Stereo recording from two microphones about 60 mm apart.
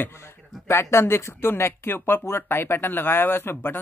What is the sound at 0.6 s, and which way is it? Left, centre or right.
Speech, left.